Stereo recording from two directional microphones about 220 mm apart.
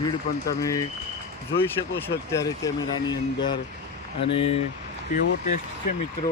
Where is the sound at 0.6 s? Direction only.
15° left (ahead or behind).